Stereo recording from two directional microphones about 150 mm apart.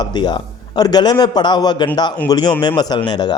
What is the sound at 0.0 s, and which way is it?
A man's voice, 30° left (ahead or behind).